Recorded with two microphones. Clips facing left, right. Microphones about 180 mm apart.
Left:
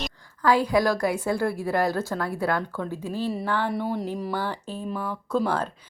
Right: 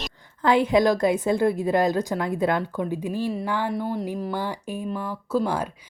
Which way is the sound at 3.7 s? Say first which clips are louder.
Right 1 dB; centre (ahead or behind).